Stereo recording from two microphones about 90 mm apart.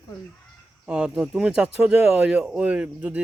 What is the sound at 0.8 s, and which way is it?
Speech, 10° right (ahead or behind).